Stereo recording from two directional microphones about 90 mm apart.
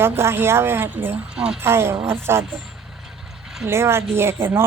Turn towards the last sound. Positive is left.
turn(degrees=-25)  # may be behind; listen again after turning